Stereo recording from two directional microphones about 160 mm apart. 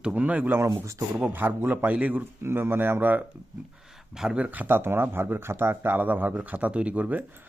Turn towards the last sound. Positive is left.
turn(degrees=-10)  # may be behind; listen again after turning